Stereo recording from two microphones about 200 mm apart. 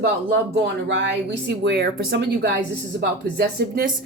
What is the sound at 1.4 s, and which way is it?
Speech, 55° right (ahead or behind).